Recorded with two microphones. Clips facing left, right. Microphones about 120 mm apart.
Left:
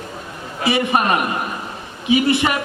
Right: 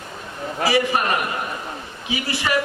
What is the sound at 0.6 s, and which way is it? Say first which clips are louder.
Speech: left 2 dB; 20° left (ahead or behind).